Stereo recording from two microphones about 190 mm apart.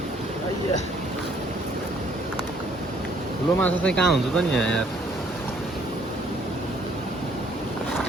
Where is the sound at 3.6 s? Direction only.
5° left (ahead or behind).